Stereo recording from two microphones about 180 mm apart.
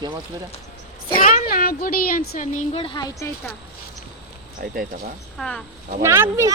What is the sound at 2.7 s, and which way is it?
Speech, 25° left (ahead or behind).